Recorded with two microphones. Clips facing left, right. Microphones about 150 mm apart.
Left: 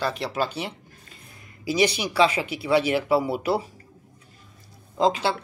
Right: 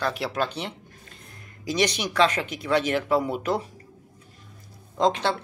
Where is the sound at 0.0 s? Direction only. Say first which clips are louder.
Even; centre (ahead or behind).